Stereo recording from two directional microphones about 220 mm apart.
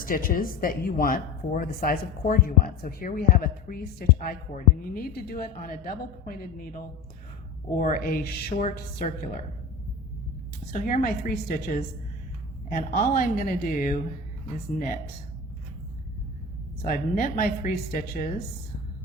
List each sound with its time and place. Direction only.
0.0 s speech: 40° left (ahead or behind)
7.8 s speech: 40° left (ahead or behind)
10.7 s speech: 40° left (ahead or behind)
16.8 s speech: 40° left (ahead or behind)